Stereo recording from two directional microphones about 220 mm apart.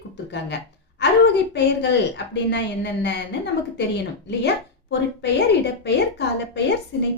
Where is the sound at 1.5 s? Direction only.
50° left (ahead or behind).